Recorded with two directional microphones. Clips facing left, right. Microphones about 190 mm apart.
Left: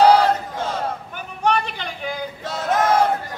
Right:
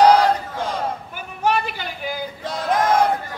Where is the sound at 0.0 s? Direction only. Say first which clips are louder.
Even; 15° right (ahead or behind).